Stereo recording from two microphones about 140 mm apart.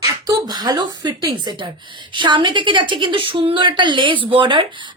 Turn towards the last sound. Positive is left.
turn(degrees=-35)  # may be behind; listen again after turning